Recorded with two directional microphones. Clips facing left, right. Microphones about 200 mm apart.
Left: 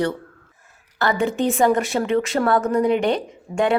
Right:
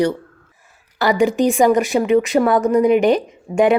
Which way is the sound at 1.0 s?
15° right (ahead or behind).